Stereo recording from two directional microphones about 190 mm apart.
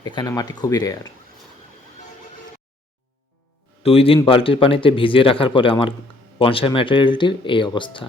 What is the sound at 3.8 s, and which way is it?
Speech, 30° left (ahead or behind).